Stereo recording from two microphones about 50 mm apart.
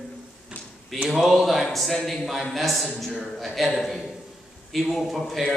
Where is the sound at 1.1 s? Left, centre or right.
Centre.